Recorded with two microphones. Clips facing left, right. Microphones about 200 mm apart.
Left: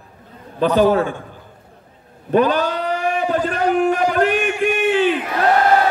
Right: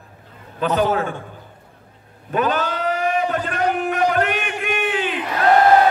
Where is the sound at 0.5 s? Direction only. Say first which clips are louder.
Left 5 dB; 35° left (ahead or behind).